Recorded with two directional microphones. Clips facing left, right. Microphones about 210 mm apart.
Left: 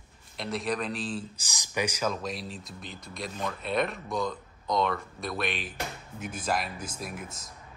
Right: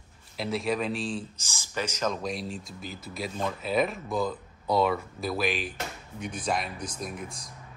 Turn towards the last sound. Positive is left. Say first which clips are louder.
# right 2 dB
turn(degrees=5)  # may be behind; listen again after turning